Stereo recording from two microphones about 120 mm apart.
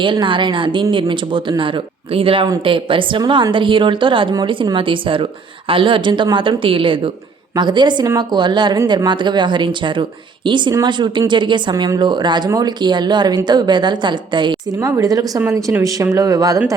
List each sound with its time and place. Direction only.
0.0 s a woman's voice: 40° right (ahead or behind)
14.8 s speech: 25° right (ahead or behind)